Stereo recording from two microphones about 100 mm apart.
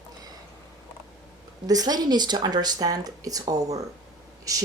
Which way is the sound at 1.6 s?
40° right (ahead or behind).